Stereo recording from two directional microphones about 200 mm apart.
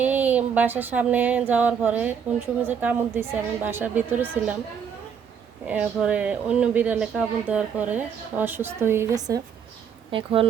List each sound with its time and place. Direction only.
0.0 s a sound: 10° right (ahead or behind)
2.6 s a woman's voice: 10° right (ahead or behind)
5.6 s a woman's voice: 5° right (ahead or behind); by 10.4 s 25° right (ahead or behind)